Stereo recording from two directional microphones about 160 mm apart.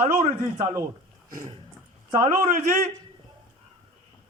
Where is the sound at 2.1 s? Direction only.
20° right (ahead or behind).